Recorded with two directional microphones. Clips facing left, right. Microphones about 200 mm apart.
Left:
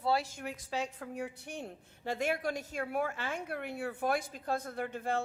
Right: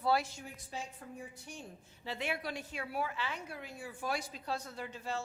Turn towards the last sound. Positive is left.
turn(degrees=55)  # may be behind; listen again after turning